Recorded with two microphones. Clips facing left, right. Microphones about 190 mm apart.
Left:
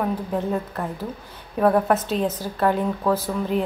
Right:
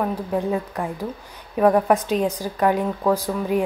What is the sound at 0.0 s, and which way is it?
A woman's voice, 10° right (ahead or behind).